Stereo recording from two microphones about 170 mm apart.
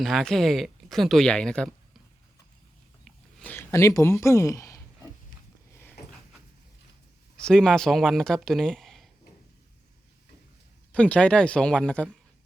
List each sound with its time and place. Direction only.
0.0 s speech: centre (ahead or behind)
3.4 s speech: 10° left (ahead or behind)
7.4 s speech: 5° left (ahead or behind)
10.9 s speech: 5° left (ahead or behind)